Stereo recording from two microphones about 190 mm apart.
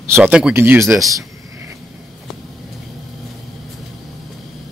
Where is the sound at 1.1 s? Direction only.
15° right (ahead or behind).